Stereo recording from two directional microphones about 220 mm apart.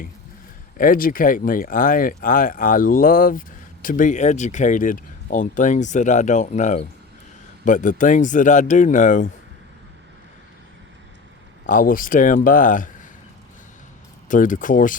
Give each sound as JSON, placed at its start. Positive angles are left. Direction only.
{"t": 0.8, "sound": "speech", "side_deg": 40}
{"t": 11.6, "sound": "speech", "side_deg": 40}
{"t": 14.3, "sound": "speech", "side_deg": 35}